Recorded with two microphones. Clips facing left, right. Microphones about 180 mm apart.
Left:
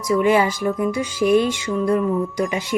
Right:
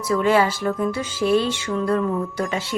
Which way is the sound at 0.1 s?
15° left (ahead or behind).